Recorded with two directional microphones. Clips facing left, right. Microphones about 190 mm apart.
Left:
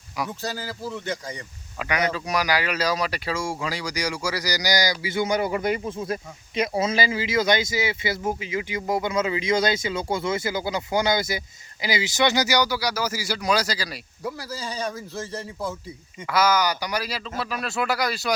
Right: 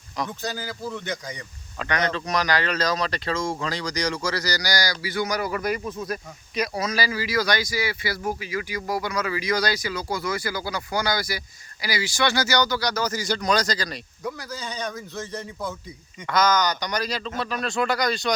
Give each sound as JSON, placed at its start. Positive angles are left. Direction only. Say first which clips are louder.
{"t": 0.2, "sound": "speech", "louder": "even", "side_deg": 5}
{"t": 1.0, "sound": "speech", "louder": "left 1 dB", "side_deg": 30}
{"t": 1.8, "sound": "speech", "louder": "even", "side_deg": 10}
{"t": 14.3, "sound": "speech", "louder": "left 2 dB", "side_deg": 30}
{"t": 16.2, "sound": "speech", "louder": "even", "side_deg": 5}